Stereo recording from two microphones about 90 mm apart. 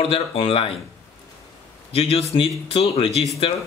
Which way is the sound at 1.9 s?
90° left.